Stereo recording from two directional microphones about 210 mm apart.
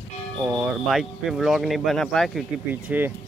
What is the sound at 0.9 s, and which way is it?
Speech, centre (ahead or behind).